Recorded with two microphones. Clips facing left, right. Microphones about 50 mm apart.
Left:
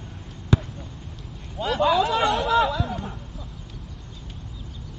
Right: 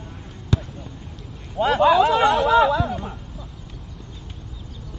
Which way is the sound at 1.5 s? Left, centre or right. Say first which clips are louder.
Right 5 dB; right.